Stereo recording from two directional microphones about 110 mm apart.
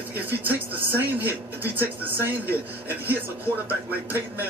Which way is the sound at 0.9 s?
15° right (ahead or behind).